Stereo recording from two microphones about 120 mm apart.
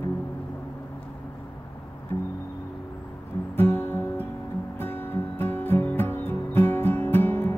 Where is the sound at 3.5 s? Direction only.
20° left (ahead or behind).